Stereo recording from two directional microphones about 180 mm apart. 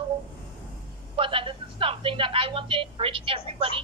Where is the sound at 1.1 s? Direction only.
30° right (ahead or behind).